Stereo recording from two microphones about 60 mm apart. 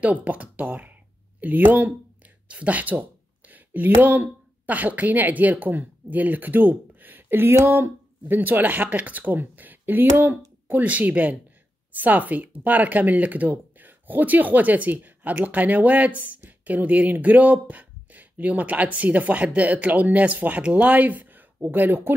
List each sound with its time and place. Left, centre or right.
0.0 s speech: right
8.4 s a woman's voice: right